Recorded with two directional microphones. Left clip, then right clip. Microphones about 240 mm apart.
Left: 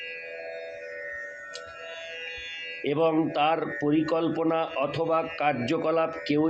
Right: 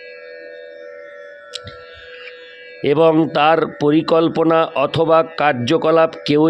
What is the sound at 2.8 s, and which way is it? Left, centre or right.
Speech, right.